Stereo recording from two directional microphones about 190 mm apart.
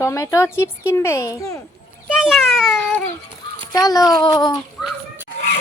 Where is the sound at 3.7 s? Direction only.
20° left (ahead or behind).